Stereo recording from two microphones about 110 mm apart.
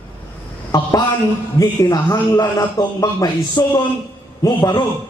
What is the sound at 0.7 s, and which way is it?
A man's voice, 35° left (ahead or behind).